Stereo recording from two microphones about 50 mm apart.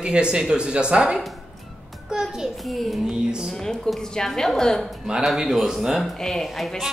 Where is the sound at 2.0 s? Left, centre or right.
Centre.